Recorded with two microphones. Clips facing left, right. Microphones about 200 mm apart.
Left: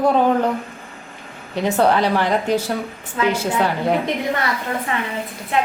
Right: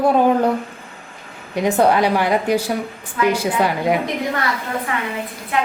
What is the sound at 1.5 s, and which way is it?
A man's voice, 10° right (ahead or behind).